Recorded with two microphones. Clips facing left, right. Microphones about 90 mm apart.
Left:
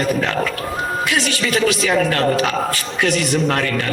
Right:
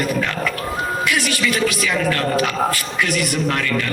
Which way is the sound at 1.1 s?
25° left (ahead or behind).